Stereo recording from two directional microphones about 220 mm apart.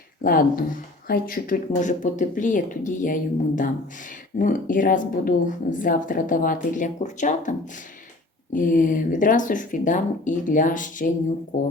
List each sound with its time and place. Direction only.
0.2 s speech: 40° left (ahead or behind)
8.5 s speech: 35° left (ahead or behind)